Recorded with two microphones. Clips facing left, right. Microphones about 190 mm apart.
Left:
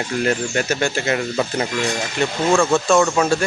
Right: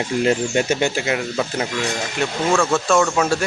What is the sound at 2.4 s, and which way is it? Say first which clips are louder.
Speech: left 2 dB; 10° left (ahead or behind).